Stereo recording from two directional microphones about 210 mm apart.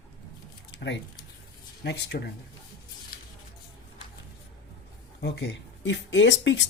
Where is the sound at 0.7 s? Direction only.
55° left (ahead or behind).